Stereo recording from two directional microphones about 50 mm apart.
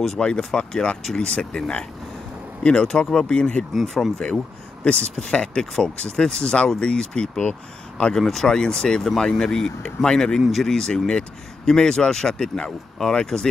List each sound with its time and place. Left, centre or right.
0.2 s speech: centre
3.7 s speech: centre
4.8 s speech: left
8.1 s speech: centre